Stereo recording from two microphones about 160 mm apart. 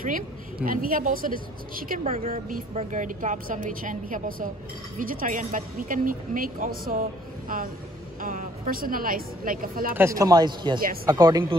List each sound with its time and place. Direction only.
0.0 s speech: 60° right (ahead or behind)
2.7 s speech: 45° right (ahead or behind)
9.9 s speech: 20° right (ahead or behind)